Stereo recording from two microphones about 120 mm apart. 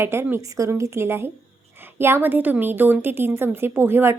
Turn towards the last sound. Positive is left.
turn(degrees=-20)  # may be behind; listen again after turning